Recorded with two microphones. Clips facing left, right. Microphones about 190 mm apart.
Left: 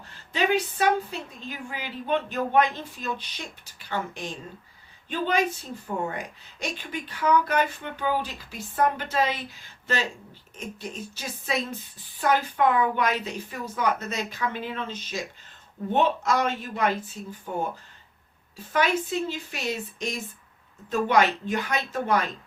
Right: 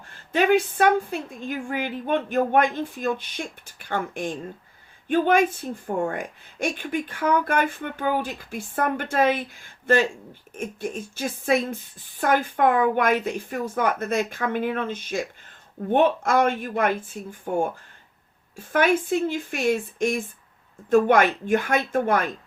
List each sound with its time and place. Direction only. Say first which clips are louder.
0.1 s a woman's voice: right 5 dB; 50° right (ahead or behind)